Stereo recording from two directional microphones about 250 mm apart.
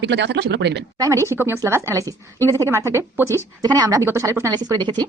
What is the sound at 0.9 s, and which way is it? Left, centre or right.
Speech, centre.